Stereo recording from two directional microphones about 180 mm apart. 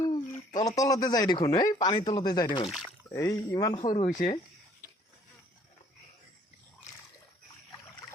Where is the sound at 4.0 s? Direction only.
40° left (ahead or behind).